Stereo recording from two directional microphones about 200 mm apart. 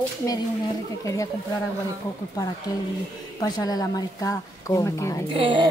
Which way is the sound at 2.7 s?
20° left (ahead or behind).